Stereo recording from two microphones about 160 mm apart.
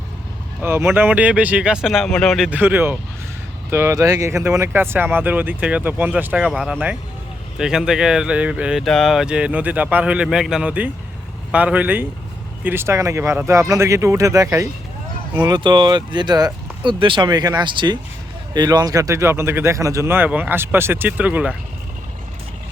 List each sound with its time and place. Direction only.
0.6 s speech: 15° right (ahead or behind); by 2.5 s centre (ahead or behind)
2.5 s speech: 10° right (ahead or behind)